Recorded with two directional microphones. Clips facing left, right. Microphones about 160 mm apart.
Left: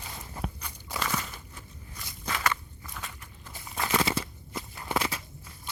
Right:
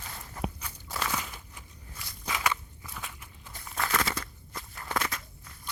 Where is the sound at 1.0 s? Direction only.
5° right (ahead or behind).